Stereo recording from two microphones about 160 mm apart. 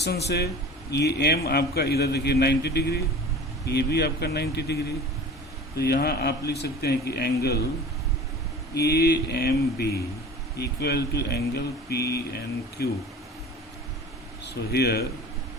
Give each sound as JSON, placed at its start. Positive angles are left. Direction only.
{"t": 0.0, "sound": "a man's voice", "side_deg": 90}
{"t": 8.7, "sound": "a man's voice", "side_deg": 90}
{"t": 14.4, "sound": "a man's voice", "side_deg": 90}